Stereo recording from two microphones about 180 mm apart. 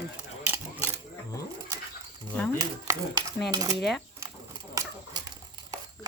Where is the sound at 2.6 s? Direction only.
15° right (ahead or behind).